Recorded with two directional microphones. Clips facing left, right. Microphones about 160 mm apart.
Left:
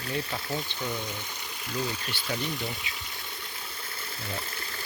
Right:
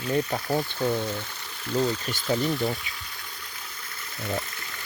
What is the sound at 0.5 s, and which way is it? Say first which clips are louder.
Speech: right 9 dB; 50° right (ahead or behind).